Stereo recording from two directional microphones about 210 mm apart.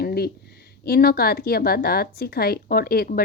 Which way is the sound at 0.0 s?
50° left (ahead or behind).